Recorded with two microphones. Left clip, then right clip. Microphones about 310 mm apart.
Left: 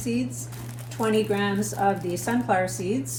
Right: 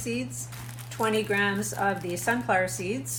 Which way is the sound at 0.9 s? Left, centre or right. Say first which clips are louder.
Left 2 dB; centre.